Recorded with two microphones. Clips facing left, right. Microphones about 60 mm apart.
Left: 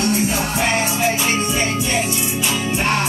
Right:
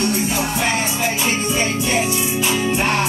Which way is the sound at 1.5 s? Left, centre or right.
Centre.